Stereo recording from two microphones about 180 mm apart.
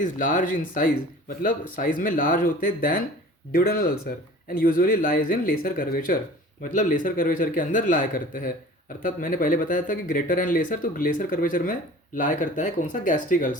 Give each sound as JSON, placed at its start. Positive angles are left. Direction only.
{"t": 0.0, "sound": "speech", "side_deg": 45}